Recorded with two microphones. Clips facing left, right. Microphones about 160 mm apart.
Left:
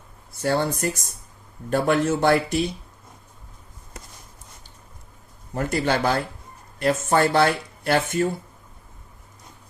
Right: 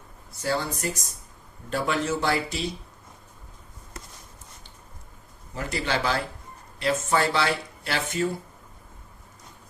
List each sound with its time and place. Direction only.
0.4 s speech: 55° left (ahead or behind)
5.5 s speech: 50° left (ahead or behind)